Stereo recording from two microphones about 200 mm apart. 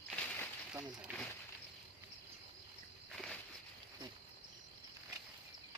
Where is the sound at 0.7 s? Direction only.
5° right (ahead or behind).